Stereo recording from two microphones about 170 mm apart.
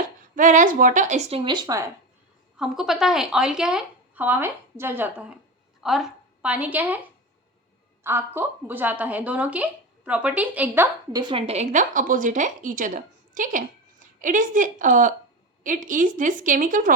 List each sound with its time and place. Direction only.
0.3 s speech: 50° right (ahead or behind); by 1.9 s 20° right (ahead or behind)
2.6 s a woman's voice: centre (ahead or behind)
8.0 s a woman's voice: 15° right (ahead or behind)
11.1 s a woman's voice: 25° right (ahead or behind); by 16.9 s 50° right (ahead or behind)